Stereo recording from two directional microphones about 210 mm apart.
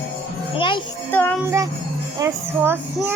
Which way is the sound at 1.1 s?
10° left (ahead or behind).